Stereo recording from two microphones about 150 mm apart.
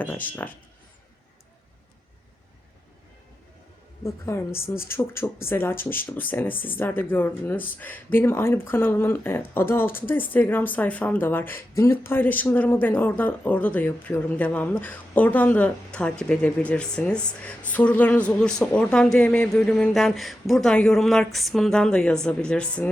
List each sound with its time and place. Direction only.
0.0 s speech: 10° left (ahead or behind)
4.0 s a woman's voice: 20° left (ahead or behind)